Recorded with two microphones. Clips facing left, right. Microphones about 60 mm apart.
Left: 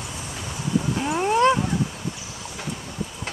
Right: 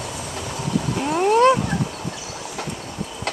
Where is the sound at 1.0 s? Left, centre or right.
Centre.